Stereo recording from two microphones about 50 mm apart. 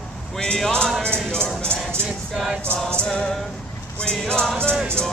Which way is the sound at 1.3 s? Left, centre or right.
Centre.